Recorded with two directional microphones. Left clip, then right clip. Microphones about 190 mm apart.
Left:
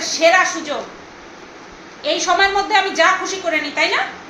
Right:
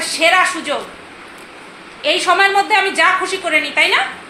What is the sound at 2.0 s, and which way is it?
A woman's voice, 40° right (ahead or behind).